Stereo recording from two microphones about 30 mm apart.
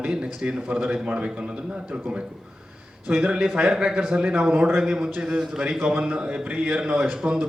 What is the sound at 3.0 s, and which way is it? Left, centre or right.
Speech, right.